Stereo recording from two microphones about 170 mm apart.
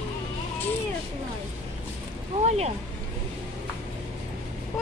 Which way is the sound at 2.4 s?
40° right (ahead or behind).